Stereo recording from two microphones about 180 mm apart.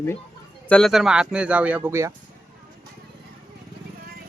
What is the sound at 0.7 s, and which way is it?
Speech, centre (ahead or behind).